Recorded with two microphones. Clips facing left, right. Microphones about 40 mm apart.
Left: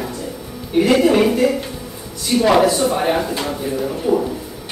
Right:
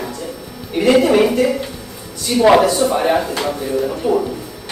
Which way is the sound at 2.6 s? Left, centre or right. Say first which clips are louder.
Right 1 dB; centre.